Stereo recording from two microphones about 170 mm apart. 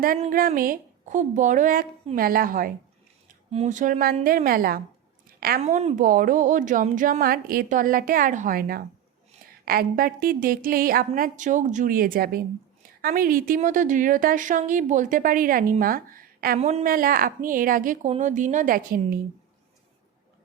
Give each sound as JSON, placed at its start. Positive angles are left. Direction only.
{"t": 0.3, "sound": "a woman's voice", "side_deg": -55}
{"t": 3.5, "sound": "a woman's voice", "side_deg": -40}
{"t": 5.6, "sound": "a woman's voice", "side_deg": -45}
{"t": 16.6, "sound": "a woman's voice", "side_deg": -35}
{"t": 16.8, "sound": "a woman's voice", "side_deg": -55}